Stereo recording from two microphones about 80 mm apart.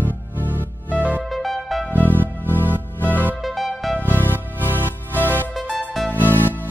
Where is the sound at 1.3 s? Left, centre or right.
Centre.